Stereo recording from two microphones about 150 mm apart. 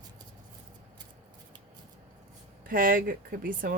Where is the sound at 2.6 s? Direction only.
70° right (ahead or behind).